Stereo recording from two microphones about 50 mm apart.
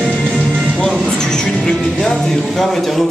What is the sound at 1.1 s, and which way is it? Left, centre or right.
Speech, centre.